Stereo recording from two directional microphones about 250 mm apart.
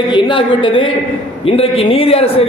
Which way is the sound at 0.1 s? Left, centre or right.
Centre.